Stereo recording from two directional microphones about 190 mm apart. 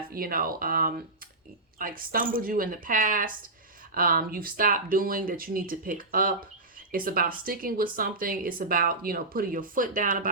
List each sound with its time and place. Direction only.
0.1 s speech: 50° right (ahead or behind)